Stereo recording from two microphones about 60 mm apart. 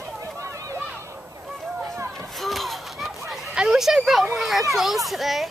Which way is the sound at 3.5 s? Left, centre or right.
Centre.